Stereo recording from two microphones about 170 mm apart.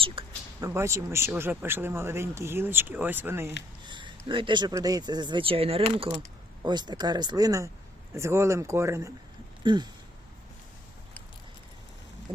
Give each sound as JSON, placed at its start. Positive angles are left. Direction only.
{"t": 0.2, "sound": "speech", "side_deg": -30}
{"t": 0.6, "sound": "speech", "side_deg": -15}
{"t": 3.8, "sound": "a sound", "side_deg": -30}
{"t": 4.3, "sound": "speech", "side_deg": -30}